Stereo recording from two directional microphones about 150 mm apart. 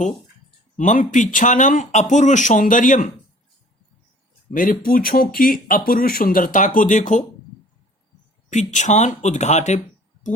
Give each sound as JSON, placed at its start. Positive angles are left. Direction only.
{"t": 0.8, "sound": "speech", "side_deg": 60}
{"t": 4.5, "sound": "speech", "side_deg": 65}
{"t": 8.4, "sound": "speech", "side_deg": 55}